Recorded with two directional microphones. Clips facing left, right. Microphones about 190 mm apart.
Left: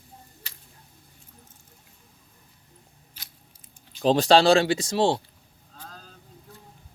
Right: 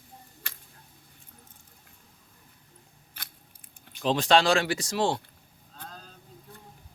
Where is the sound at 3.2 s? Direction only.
60° right (ahead or behind).